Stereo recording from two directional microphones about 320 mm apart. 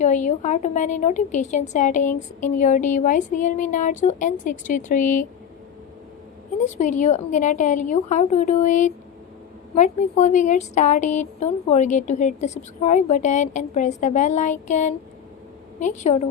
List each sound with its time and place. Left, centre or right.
0.0 s a woman's voice: left
6.7 s a woman's voice: left